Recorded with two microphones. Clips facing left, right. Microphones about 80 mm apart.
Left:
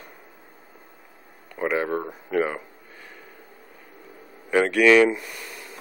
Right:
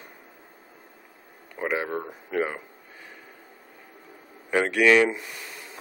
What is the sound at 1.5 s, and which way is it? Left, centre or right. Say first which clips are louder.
Speech: left 3 dB; centre.